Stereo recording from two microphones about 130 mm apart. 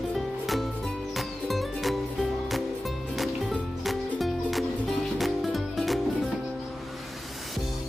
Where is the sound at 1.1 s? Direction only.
Centre (ahead or behind).